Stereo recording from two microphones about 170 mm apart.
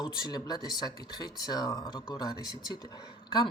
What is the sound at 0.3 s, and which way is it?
Speech, 25° left (ahead or behind).